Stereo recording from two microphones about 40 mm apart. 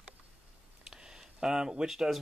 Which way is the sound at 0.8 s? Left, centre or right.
Centre.